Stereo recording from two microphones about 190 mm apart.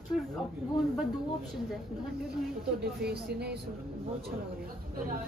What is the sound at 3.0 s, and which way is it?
Speech, 60° right (ahead or behind).